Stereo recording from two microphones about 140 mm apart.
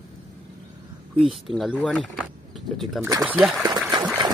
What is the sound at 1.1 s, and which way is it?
Speech, centre (ahead or behind).